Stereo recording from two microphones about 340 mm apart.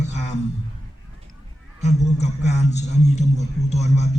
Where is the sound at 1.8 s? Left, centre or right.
Centre.